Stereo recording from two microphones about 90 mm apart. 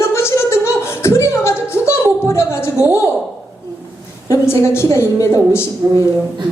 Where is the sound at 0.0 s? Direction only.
30° left (ahead or behind).